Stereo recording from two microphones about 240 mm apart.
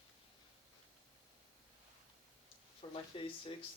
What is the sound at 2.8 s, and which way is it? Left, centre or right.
Speech, left.